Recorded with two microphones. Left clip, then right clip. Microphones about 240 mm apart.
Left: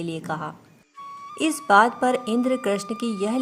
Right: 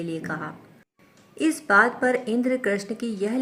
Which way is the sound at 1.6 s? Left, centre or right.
Left.